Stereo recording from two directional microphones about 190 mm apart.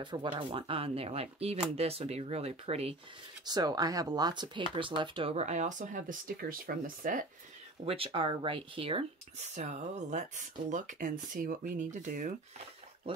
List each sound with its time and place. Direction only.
0.0 s speech: 25° right (ahead or behind)
3.4 s speech: 20° right (ahead or behind); by 7.2 s 45° right (ahead or behind)
7.8 s speech: 30° right (ahead or behind)